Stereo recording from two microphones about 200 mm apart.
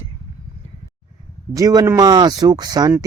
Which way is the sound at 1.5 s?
15° right (ahead or behind).